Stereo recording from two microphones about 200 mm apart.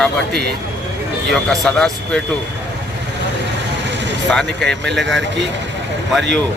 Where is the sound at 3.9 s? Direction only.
60° right (ahead or behind).